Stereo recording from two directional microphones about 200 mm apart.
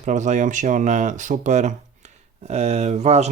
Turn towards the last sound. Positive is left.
turn(degrees=-35)  # may be behind; listen again after turning